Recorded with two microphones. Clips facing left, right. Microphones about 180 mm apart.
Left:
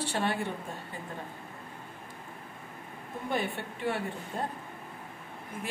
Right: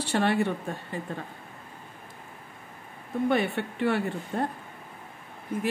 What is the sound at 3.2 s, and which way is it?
Speech, 70° right (ahead or behind).